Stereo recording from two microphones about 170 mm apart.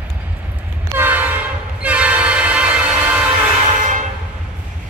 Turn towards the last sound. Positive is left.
turn(degrees=-45)  # may be behind; listen again after turning